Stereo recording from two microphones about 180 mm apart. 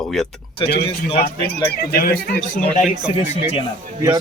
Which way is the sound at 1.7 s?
55° left (ahead or behind).